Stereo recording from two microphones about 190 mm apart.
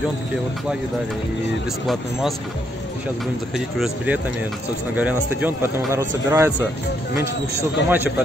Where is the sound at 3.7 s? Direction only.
5° right (ahead or behind).